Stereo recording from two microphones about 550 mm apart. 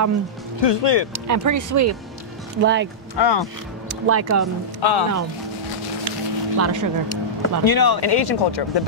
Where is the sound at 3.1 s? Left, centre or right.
Left.